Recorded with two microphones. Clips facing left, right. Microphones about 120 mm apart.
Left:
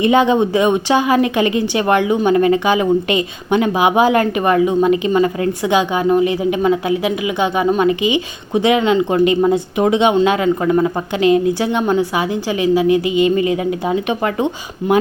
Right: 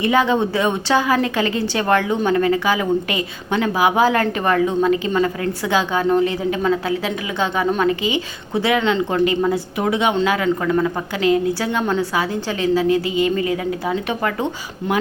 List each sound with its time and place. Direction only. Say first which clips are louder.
0.0 s a woman's voice: left 4 dB; 20° left (ahead or behind)